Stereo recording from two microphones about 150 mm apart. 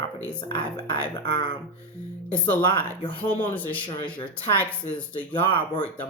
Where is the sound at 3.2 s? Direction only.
35° left (ahead or behind).